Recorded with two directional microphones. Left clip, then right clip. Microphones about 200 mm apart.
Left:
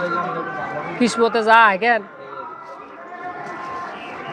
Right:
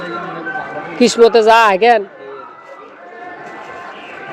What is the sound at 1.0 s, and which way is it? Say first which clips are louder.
Speech: right 9 dB; 60° right (ahead or behind).